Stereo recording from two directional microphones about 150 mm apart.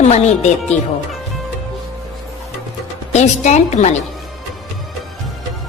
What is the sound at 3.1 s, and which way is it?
Speech, 50° left (ahead or behind).